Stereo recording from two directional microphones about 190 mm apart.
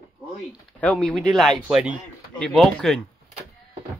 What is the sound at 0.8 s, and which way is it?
Speech, 5° left (ahead or behind).